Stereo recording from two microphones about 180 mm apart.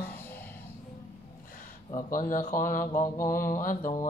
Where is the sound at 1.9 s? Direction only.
50° left (ahead or behind).